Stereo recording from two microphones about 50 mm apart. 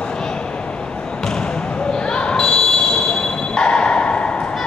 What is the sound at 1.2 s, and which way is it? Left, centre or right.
Basketball bounce, centre.